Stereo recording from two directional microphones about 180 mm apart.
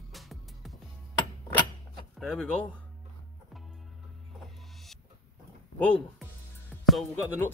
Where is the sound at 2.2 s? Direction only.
Centre (ahead or behind).